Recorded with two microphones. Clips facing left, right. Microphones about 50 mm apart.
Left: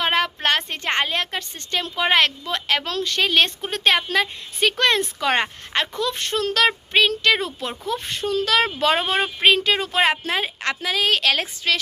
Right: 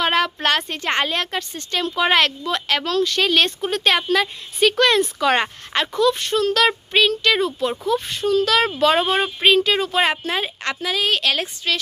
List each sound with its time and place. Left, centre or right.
0.0 s a sound: left
0.4 s a woman's voice: left
6.0 s speech: left
10.8 s a woman's voice: left